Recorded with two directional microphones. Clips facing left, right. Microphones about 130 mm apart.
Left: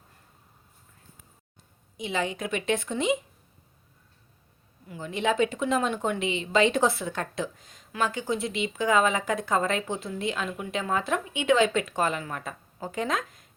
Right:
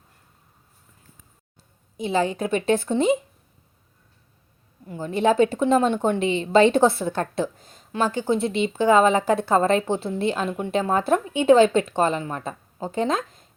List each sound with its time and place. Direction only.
2.0 s a woman's voice: 35° right (ahead or behind)
4.9 s a woman's voice: 35° right (ahead or behind)